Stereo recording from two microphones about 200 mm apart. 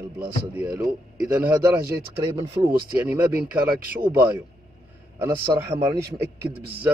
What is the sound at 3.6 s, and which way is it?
Speech, 45° right (ahead or behind).